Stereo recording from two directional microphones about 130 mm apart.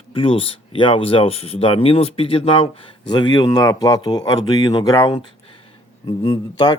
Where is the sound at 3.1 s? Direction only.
35° left (ahead or behind).